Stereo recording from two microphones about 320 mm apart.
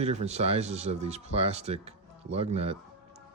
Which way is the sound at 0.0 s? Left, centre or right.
Centre.